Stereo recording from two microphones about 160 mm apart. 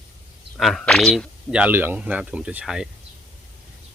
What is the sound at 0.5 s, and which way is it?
Speech, centre (ahead or behind).